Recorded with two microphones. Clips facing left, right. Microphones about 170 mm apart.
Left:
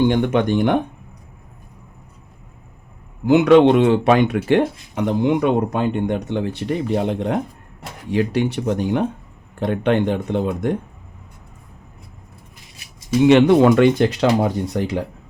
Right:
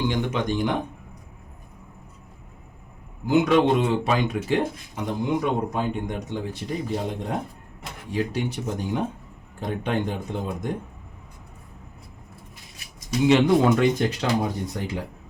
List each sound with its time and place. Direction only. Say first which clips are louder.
0.0 s speech: left 8 dB; 55° left (ahead or behind)
3.2 s speech: left 7 dB; 70° left (ahead or behind)
13.2 s speech: left 6 dB; 70° left (ahead or behind)